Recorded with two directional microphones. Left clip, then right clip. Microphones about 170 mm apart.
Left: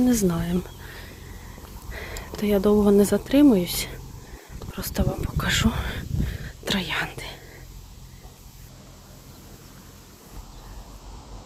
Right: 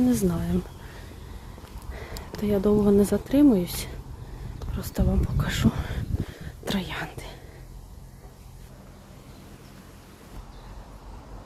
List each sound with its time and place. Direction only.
0.0 s speech: 10° right (ahead or behind)
1.9 s a sound: 10° right (ahead or behind)
2.4 s speech: 5° right (ahead or behind)
6.4 s whispering: 10° right (ahead or behind)